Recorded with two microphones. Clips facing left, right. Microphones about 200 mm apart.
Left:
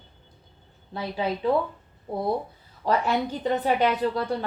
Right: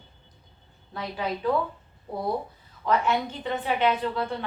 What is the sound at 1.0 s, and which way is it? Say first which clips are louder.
Speech: left 3 dB; 25° left (ahead or behind).